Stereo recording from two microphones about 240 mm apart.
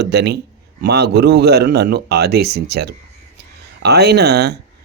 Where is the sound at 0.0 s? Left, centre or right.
Right.